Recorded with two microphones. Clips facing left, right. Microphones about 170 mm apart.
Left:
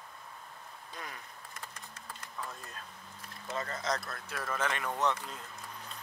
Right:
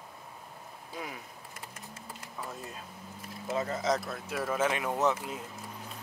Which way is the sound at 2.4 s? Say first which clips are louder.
Right 4 dB; 10° right (ahead or behind).